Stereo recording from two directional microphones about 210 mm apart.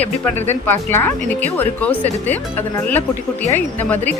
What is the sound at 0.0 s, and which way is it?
Speech, 30° left (ahead or behind).